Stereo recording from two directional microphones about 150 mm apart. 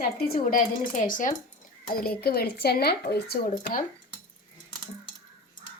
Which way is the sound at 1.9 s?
85° left.